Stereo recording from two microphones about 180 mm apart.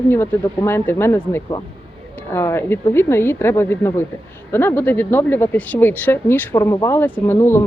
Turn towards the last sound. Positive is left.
turn(degrees=10)  # may be behind; listen again after turning